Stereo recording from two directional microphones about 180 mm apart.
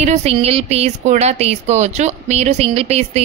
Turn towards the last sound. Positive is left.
turn(degrees=-35)  # may be behind; listen again after turning